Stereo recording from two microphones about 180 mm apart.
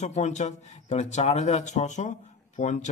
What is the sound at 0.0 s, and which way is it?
A man's voice, 40° left (ahead or behind).